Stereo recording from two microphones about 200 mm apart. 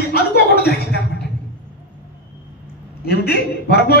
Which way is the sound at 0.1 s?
50° left (ahead or behind).